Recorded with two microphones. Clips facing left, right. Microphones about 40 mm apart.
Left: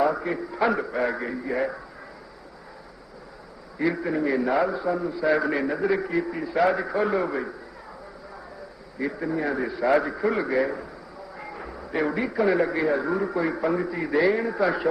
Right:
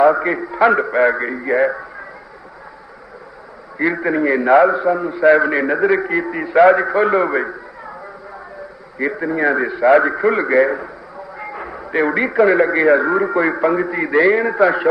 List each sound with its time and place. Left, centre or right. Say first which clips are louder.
0.0 s a man's voice: right 10 dB; right
3.8 s a man's voice: right 7 dB; right
4.4 s a man's voice: right 11 dB; right
9.0 s a man's voice: right 8 dB; right
11.3 s music: right 8 dB; right
12.5 s a man's voice: right 8 dB; right